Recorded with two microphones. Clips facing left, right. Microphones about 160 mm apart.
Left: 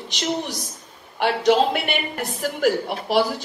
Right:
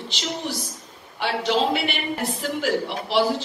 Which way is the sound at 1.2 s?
50° left (ahead or behind).